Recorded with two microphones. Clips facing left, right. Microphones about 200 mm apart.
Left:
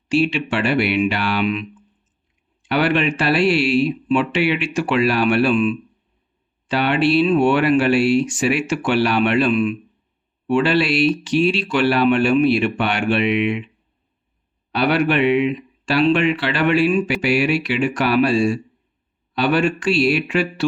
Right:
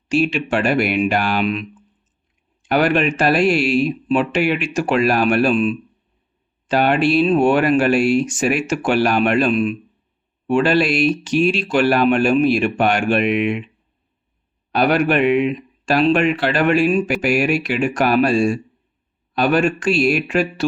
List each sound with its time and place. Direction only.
0.1 s speech: 45° right (ahead or behind)
2.6 s speech: 45° right (ahead or behind)
14.7 s speech: 45° right (ahead or behind)